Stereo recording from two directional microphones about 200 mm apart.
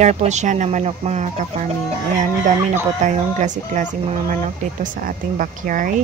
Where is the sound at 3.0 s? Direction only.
40° right (ahead or behind).